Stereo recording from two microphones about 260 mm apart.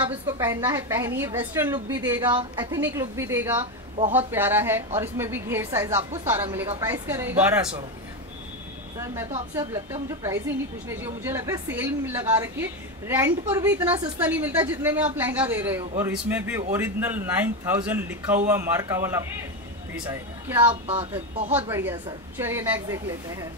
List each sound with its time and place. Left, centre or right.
0.1 s a woman's voice: centre
9.1 s a woman's voice: centre